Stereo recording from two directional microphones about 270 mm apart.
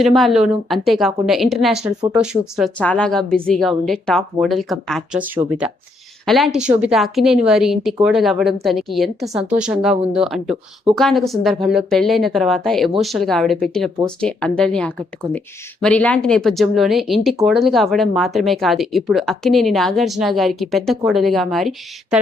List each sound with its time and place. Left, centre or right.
0.0 s speech: centre